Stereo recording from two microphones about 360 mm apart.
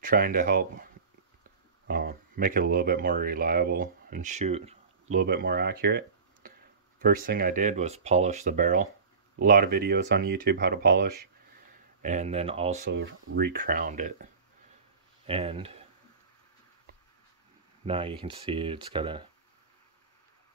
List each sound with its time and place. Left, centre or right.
0.0 s speech: right
1.9 s speech: right
12.9 s speech: right
15.2 s speech: centre
17.8 s speech: centre